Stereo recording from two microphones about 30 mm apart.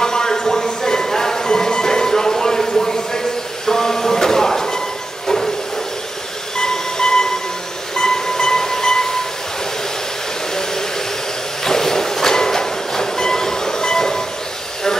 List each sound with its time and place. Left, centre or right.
0.0 s a sound: left
5.2 s hiss: centre
6.6 s train: left
7.9 s music: centre
11.6 s train: centre